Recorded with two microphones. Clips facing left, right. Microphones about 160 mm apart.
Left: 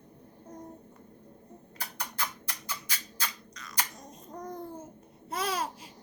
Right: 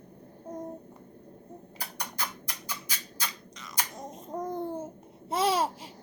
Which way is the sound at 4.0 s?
25° right (ahead or behind).